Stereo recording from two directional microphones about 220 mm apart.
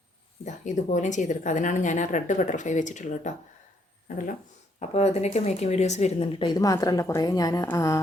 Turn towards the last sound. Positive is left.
turn(degrees=15)  # may be behind; listen again after turning